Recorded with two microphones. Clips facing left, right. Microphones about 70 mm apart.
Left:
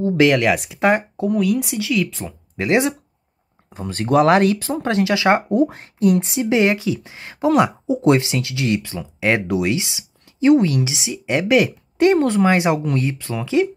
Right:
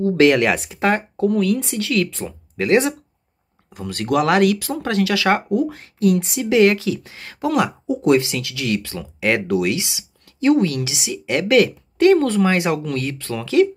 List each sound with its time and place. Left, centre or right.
0.1 s speech: centre
0.8 s speech: centre
2.5 s speech: centre
3.7 s speech: left